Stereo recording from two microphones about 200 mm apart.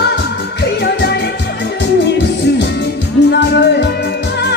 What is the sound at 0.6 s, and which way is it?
Music, 55° left (ahead or behind).